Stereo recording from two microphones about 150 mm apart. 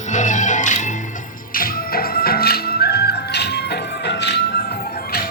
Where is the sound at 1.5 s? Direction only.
75° left (ahead or behind).